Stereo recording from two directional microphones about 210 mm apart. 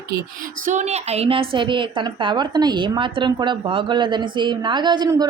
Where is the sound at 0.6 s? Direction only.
35° right (ahead or behind).